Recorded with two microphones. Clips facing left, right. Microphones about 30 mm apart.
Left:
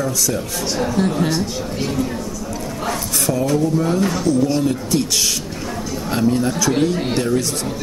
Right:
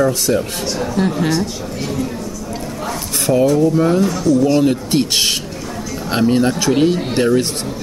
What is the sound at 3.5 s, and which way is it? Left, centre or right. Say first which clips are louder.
Speech: right 4 dB; centre.